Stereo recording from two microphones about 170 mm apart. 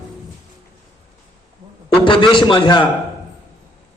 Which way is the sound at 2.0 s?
30° left (ahead or behind).